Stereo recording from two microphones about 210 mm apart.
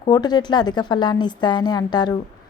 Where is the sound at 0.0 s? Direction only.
20° left (ahead or behind).